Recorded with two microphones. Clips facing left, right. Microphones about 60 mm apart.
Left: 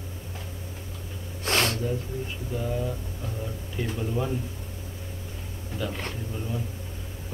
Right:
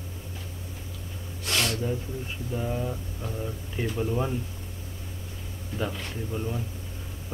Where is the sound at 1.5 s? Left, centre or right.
Left.